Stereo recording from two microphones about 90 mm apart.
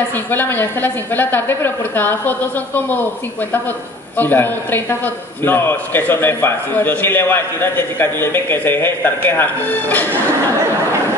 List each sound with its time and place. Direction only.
0.3 s a man's voice: 20° left (ahead or behind)
4.2 s a man's voice: 20° left (ahead or behind)